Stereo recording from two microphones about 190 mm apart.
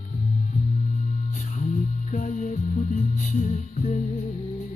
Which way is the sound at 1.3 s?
40° left (ahead or behind).